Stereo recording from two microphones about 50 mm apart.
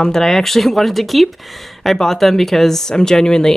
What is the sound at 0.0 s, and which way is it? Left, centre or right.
Speech, centre.